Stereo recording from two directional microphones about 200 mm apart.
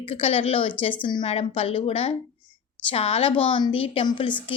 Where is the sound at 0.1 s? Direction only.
30° left (ahead or behind).